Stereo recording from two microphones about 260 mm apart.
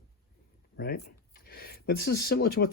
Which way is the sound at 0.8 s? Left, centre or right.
Left.